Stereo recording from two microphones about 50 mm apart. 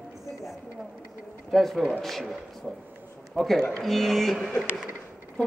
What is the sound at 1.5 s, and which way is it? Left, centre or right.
Speech, centre.